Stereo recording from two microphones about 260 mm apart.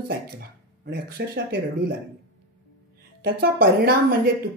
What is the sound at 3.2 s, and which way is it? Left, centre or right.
Speech, right.